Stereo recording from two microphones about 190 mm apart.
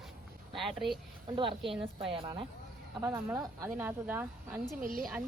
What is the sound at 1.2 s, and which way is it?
Speech, 25° right (ahead or behind).